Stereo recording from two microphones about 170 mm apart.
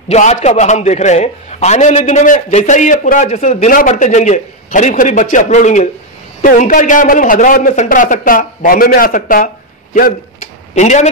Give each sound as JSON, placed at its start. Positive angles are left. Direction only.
{"t": 0.1, "sound": "a man's voice", "side_deg": 40}
{"t": 10.7, "sound": "speech", "side_deg": 45}